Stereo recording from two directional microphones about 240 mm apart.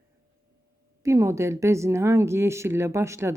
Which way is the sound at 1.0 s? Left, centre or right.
Centre.